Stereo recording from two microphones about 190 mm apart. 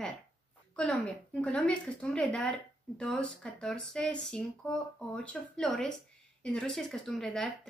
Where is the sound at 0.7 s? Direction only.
5° left (ahead or behind).